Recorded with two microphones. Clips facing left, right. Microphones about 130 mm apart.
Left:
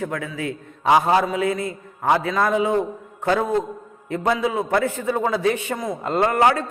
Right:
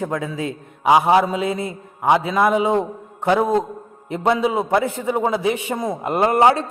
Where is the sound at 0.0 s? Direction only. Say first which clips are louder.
Right 3 dB; 25° right (ahead or behind).